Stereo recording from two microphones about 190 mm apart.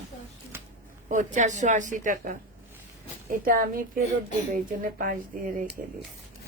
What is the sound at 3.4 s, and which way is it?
A woman's voice, 50° right (ahead or behind).